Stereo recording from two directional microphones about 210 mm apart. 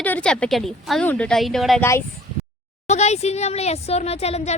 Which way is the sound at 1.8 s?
10° left (ahead or behind).